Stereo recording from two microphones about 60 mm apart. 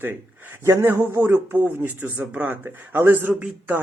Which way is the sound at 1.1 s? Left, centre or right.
Right.